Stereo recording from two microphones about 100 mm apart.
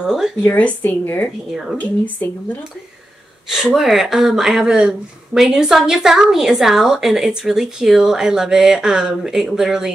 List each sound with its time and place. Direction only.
0.0 s speech: 5° right (ahead or behind)
0.4 s a woman's voice: 15° left (ahead or behind)
1.5 s speech: centre (ahead or behind)
1.8 s speech: 15° left (ahead or behind)
3.5 s speech: 5° right (ahead or behind)